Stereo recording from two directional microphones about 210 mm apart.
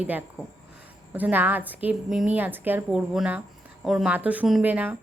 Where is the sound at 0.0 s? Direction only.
10° right (ahead or behind).